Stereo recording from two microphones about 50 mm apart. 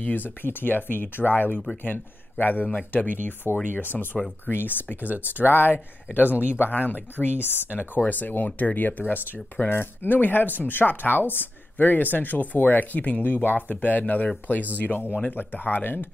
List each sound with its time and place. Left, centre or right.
0.0 s speech: left
5.0 s speech: right
5.5 s speech: left